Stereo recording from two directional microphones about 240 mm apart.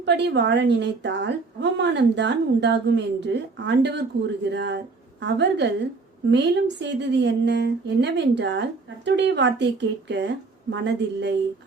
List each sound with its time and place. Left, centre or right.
0.0 s a woman's voice: right